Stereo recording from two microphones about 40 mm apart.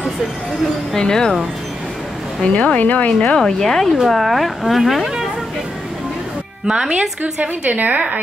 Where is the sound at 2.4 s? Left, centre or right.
Left.